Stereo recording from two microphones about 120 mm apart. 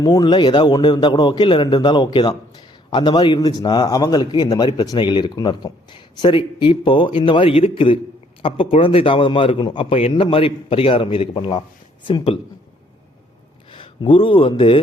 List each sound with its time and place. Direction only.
0.0 s a man's voice: 35° left (ahead or behind)
13.7 s speech: 45° left (ahead or behind)